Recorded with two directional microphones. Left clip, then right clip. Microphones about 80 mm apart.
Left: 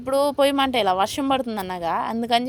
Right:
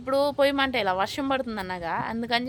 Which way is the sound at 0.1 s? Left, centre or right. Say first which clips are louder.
Left 3 dB; left.